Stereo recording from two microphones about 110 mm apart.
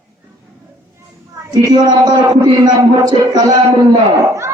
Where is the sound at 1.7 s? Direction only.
40° right (ahead or behind).